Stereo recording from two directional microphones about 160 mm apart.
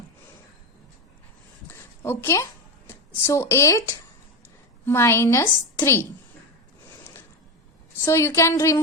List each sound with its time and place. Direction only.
1.6 s a sound: 15° left (ahead or behind)
4.9 s a woman's voice: 15° left (ahead or behind)
8.0 s a woman's voice: 20° left (ahead or behind)